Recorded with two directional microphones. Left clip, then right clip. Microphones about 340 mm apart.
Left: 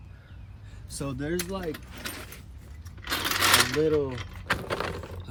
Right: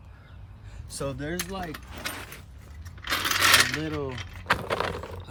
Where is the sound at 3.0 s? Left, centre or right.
Centre.